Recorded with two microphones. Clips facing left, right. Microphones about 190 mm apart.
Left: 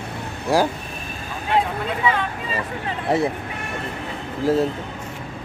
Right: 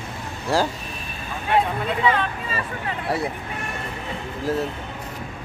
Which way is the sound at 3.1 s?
20° left (ahead or behind).